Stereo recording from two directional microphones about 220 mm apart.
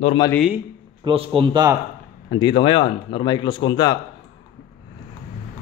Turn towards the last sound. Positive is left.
turn(degrees=20)  # may be behind; listen again after turning